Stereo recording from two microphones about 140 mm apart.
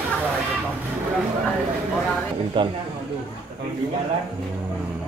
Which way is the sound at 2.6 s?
35° right (ahead or behind).